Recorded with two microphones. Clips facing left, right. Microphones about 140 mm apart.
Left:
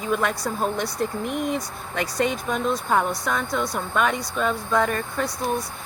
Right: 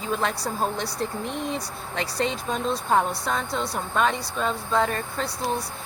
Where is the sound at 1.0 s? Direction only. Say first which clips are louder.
Left 4 dB; 15° left (ahead or behind).